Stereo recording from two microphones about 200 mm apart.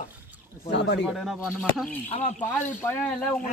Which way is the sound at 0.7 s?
60° left (ahead or behind).